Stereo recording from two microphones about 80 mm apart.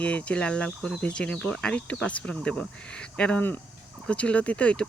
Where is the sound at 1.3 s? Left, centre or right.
Centre.